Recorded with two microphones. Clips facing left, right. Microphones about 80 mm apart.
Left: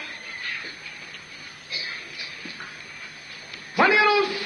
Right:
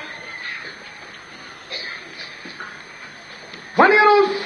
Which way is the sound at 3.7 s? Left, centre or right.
Right.